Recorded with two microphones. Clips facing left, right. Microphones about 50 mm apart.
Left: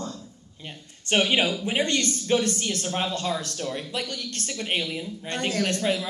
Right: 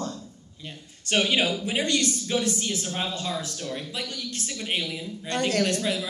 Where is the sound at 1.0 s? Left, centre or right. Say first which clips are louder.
Left 1 dB; left.